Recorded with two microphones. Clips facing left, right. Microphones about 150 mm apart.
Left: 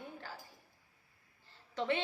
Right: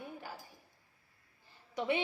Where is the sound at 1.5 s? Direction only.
15° right (ahead or behind).